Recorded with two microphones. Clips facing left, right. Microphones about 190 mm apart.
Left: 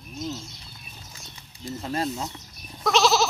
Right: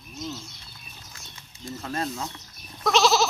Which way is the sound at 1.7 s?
25° left (ahead or behind).